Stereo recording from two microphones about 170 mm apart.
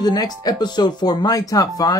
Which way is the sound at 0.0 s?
25° left (ahead or behind).